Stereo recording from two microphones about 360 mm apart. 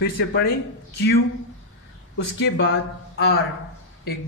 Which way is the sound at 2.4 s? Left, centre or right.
Left.